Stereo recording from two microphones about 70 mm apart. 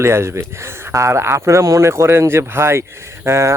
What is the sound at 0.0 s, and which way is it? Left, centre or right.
Speech, right.